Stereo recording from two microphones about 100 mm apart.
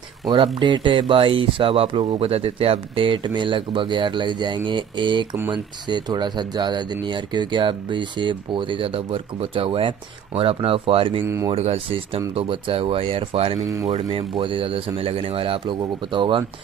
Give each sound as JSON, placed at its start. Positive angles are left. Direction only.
{"t": 0.6, "sound": "speech", "side_deg": -55}
{"t": 2.1, "sound": "speech", "side_deg": -75}
{"t": 11.2, "sound": "speech", "side_deg": -30}
{"t": 11.5, "sound": "speech", "side_deg": -90}
{"t": 12.4, "sound": "speech", "side_deg": -65}